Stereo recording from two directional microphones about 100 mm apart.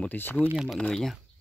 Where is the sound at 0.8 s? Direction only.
5° left (ahead or behind).